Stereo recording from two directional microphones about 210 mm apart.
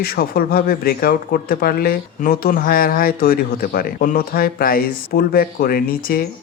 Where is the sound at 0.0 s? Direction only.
45° left (ahead or behind).